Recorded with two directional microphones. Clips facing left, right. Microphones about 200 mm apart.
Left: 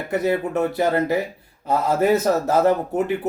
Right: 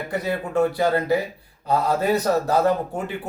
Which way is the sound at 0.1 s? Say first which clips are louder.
Left 5 dB; 20° left (ahead or behind).